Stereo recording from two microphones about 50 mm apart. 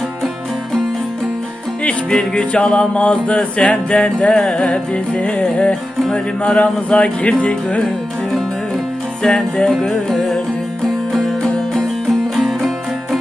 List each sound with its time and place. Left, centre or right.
1.8 s music: centre
9.2 s music: centre
9.7 s music: centre